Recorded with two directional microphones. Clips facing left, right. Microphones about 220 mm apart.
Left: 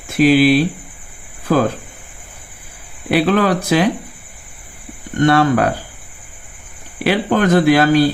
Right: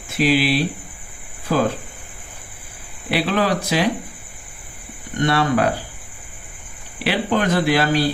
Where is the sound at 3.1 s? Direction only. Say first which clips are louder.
Left 5 dB; 50° left (ahead or behind).